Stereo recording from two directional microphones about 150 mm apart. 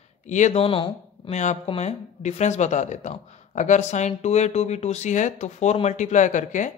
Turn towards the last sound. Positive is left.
turn(degrees=55)  # may be behind; listen again after turning